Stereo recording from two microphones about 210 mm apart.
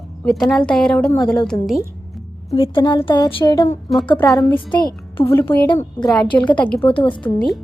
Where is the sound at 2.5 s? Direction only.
25° left (ahead or behind); by 6.9 s 5° left (ahead or behind).